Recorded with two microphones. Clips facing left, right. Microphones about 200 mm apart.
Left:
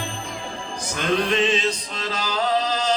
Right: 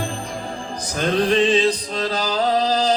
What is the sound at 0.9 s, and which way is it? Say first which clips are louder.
Music: right 4 dB; 35° right (ahead or behind).